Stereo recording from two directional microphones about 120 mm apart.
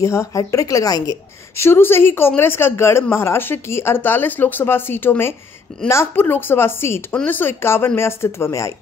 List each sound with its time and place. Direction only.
0.0 s speech: 25° left (ahead or behind)